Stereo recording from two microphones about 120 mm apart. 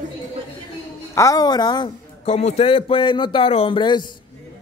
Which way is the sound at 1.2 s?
30° left (ahead or behind).